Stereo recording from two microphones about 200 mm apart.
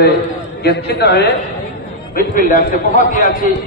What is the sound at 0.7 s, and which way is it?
A man's voice, 55° left (ahead or behind).